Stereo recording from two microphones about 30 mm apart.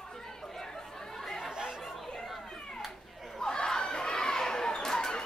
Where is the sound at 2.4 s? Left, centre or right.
Centre.